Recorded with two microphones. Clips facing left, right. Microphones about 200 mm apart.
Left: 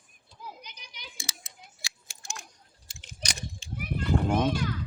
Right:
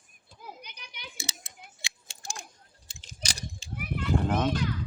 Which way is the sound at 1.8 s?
30° right (ahead or behind).